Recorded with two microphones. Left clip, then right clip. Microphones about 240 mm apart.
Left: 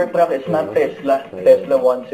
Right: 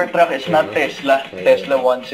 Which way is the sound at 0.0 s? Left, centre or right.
Centre.